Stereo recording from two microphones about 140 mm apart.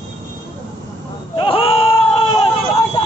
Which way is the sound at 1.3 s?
40° left (ahead or behind).